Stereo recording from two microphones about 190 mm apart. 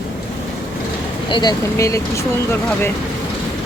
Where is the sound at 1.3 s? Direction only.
20° left (ahead or behind).